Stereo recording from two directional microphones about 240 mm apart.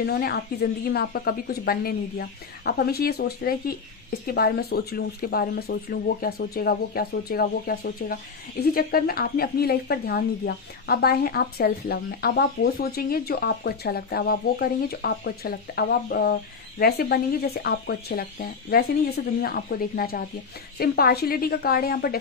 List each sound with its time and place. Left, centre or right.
0.0 s a woman's voice: left